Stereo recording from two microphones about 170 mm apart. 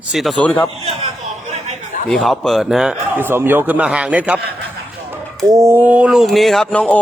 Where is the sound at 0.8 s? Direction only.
40° right (ahead or behind).